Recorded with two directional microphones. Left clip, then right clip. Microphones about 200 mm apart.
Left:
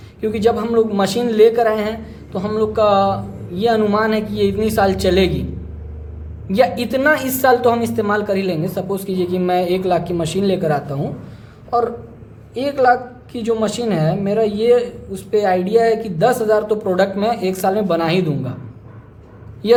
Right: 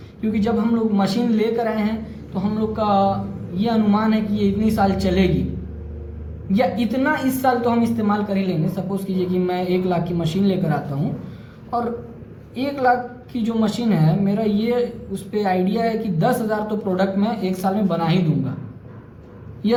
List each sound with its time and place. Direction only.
0.3 s a man's voice: 55° left (ahead or behind)
6.5 s a woman's voice: 55° left (ahead or behind)
12.5 s a woman's voice: 45° left (ahead or behind)